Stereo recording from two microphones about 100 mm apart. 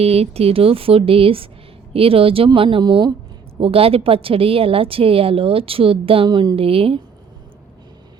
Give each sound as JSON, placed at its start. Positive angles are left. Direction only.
{"t": 0.0, "sound": "a woman's voice", "side_deg": -90}
{"t": 2.5, "sound": "speech", "side_deg": -55}
{"t": 3.6, "sound": "a woman's voice", "side_deg": -70}
{"t": 6.2, "sound": "speech", "side_deg": -45}
{"t": 6.6, "sound": "a woman's voice", "side_deg": -70}